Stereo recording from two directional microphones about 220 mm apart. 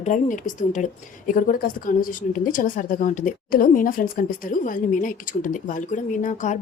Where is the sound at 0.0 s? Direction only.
35° left (ahead or behind).